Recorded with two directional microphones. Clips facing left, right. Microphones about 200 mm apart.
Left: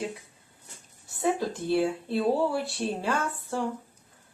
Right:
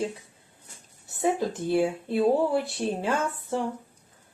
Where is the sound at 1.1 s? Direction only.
20° right (ahead or behind).